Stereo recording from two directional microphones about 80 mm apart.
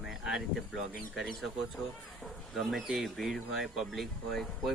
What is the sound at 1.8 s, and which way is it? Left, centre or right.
Speech, centre.